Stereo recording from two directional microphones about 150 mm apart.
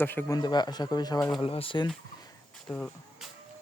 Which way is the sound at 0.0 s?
15° left (ahead or behind).